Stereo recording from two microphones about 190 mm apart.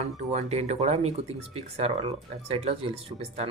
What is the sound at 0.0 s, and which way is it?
Speech, 35° right (ahead or behind).